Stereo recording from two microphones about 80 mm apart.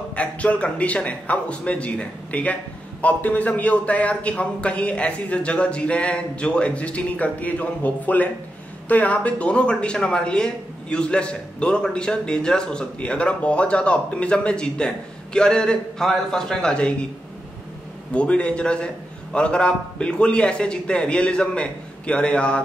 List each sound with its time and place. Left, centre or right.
0.1 s a man's voice: centre
18.1 s a man's voice: centre